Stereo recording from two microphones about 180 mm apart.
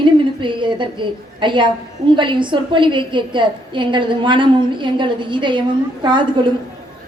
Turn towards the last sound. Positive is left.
turn(degrees=-25)  # may be behind; listen again after turning